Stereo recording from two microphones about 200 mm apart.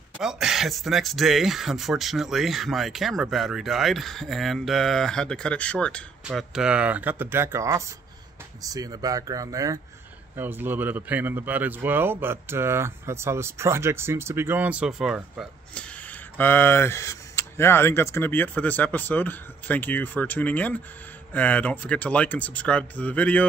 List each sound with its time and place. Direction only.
0.2 s speech: 5° right (ahead or behind)